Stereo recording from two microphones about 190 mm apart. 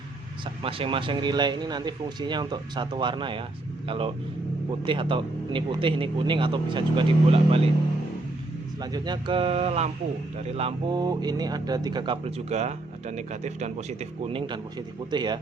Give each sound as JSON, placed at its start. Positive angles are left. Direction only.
{"t": 0.6, "sound": "speech", "side_deg": -30}
{"t": 8.8, "sound": "speech", "side_deg": -20}